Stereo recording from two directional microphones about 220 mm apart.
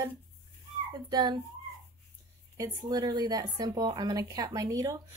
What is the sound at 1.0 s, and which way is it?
Speech, 20° right (ahead or behind).